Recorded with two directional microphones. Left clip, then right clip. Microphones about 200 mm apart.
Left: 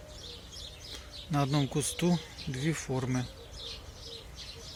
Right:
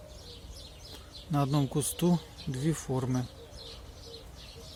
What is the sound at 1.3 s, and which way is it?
Speech, 15° right (ahead or behind).